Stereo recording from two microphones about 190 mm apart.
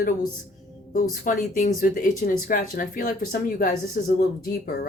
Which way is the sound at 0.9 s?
45° left (ahead or behind).